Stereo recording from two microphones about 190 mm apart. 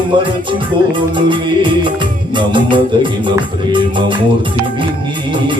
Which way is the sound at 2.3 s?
25° right (ahead or behind).